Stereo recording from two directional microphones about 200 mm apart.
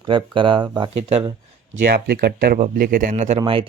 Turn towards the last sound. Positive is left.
turn(degrees=-25)  # may be behind; listen again after turning